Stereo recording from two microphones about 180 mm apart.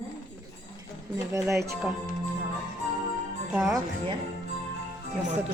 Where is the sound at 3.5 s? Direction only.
5° right (ahead or behind).